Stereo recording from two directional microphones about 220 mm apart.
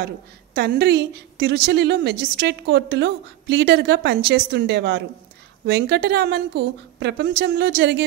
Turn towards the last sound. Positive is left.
turn(degrees=-50)  # may be behind; listen again after turning